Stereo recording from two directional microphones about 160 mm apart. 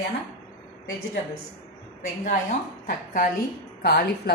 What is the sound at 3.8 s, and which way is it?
Speech, 85° left.